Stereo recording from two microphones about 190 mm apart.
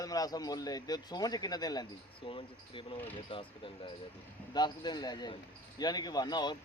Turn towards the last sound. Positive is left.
turn(degrees=20)  # may be behind; listen again after turning